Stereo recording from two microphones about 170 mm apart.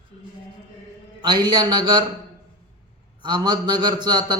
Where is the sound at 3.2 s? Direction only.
25° right (ahead or behind).